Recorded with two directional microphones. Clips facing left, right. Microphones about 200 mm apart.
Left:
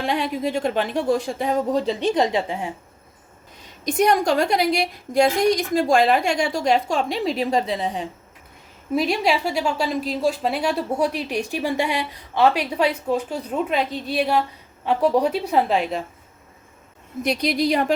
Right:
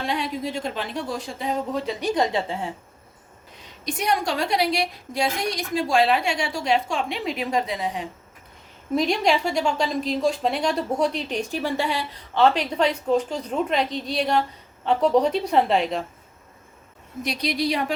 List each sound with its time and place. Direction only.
0.1 s a woman's voice: 55° left (ahead or behind)
1.7 s a woman's voice: 25° left (ahead or behind)
3.8 s a woman's voice: 45° left (ahead or behind); by 8.0 s 30° left (ahead or behind)
9.0 s a woman's voice: 5° left (ahead or behind)
17.2 s a woman's voice: 50° left (ahead or behind)